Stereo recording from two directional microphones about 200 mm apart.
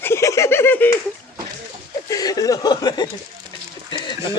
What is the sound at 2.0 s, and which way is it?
Speech, 20° left (ahead or behind).